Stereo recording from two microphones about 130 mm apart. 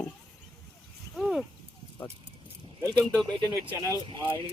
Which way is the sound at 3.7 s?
25° right (ahead or behind).